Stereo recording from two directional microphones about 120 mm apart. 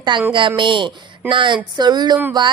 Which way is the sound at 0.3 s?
45° right (ahead or behind).